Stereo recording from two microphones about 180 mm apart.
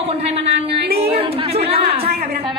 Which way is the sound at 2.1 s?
60° right (ahead or behind).